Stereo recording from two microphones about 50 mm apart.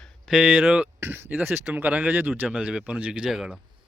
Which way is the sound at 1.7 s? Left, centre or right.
Right.